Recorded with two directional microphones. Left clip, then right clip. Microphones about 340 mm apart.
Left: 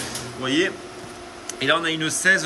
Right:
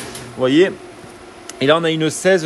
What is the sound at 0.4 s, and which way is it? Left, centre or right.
Speech, centre.